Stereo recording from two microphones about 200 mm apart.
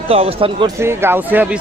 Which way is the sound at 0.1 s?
30° right (ahead or behind).